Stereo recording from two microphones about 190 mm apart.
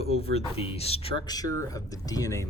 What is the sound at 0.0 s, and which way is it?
Speech, 30° left (ahead or behind).